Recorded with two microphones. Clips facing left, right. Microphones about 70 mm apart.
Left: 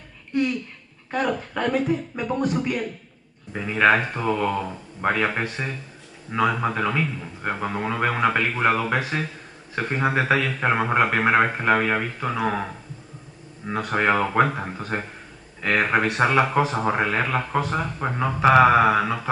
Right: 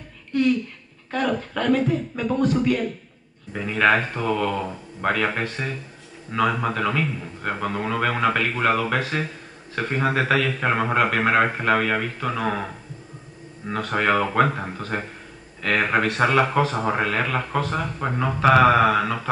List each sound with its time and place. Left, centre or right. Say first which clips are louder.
0.3 s a sound: right 2 dB; centre
1.1 s speech: right 1 dB; centre
6.6 s speech: even; centre
13.7 s speech: even; centre
17.9 s a man's voice: even; centre